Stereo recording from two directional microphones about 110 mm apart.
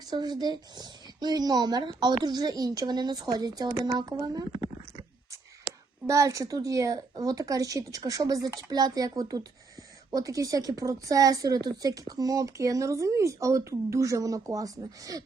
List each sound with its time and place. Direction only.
0.0 s speech: 40° right (ahead or behind)
6.1 s speech: 30° right (ahead or behind)